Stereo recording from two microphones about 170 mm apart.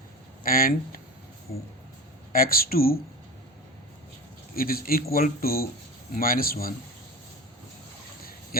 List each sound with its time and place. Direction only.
0.4 s speech: 55° left (ahead or behind)
2.3 s speech: 60° left (ahead or behind)
4.5 s speech: 60° left (ahead or behind)